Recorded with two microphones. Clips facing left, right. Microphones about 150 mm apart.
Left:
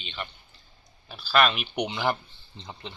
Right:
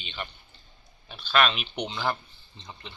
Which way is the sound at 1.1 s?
5° left (ahead or behind).